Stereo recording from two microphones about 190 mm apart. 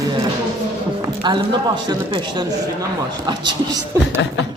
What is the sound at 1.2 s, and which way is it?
A man's voice, 25° right (ahead or behind).